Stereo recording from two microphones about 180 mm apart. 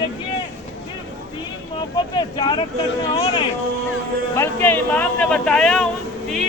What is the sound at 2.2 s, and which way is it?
Speech, 25° left (ahead or behind).